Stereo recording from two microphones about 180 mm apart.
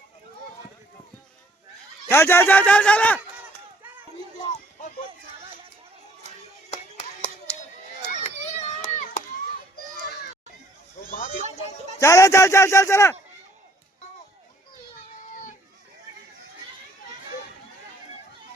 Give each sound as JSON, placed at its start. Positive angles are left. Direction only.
{"t": 2.0, "sound": "speech", "side_deg": 15}
{"t": 8.1, "sound": "children playing", "side_deg": 35}
{"t": 11.1, "sound": "a sound", "side_deg": 45}
{"t": 11.9, "sound": "speech", "side_deg": 15}